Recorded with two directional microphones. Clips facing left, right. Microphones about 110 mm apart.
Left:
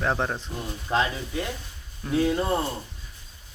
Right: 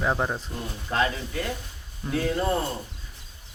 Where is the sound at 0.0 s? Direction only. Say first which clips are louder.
Even; 5° right (ahead or behind).